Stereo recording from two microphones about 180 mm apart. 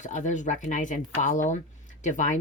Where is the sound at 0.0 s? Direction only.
45° left (ahead or behind).